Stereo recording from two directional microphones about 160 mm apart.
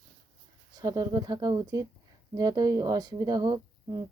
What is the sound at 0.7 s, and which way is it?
Speech, 25° right (ahead or behind).